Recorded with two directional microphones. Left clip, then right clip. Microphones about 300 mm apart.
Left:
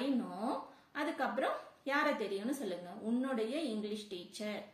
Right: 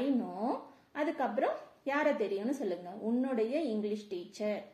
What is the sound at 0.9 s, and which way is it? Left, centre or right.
A woman's voice, centre.